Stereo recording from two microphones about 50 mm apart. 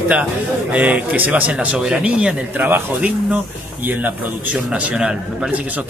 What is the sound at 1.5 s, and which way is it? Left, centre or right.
Speech, right.